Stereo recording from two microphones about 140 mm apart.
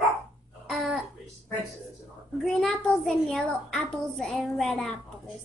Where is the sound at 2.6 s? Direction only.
5° left (ahead or behind).